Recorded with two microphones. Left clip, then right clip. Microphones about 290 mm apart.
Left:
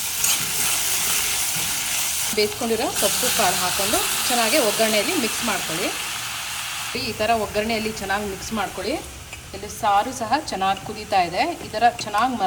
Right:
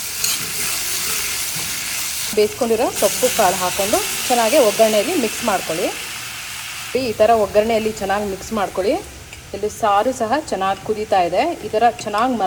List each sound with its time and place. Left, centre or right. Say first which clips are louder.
0.2 s stir: right 1 dB; centre
2.3 s frying: right 7 dB; centre
6.9 s frying: right 8 dB; centre
10.2 s frying: right 3 dB; centre